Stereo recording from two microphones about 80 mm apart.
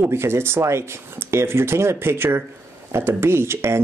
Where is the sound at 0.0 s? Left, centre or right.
Right.